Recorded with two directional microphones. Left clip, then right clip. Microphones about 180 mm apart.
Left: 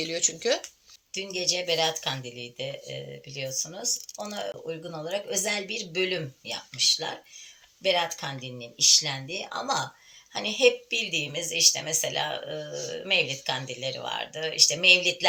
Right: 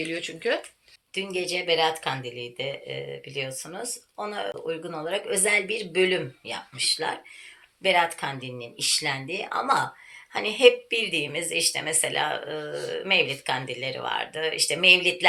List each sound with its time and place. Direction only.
0.1 s speech: 45° left (ahead or behind)
1.1 s speech: 15° right (ahead or behind)